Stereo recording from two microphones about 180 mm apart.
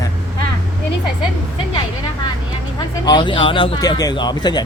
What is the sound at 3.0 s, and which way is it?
Speech, 25° left (ahead or behind).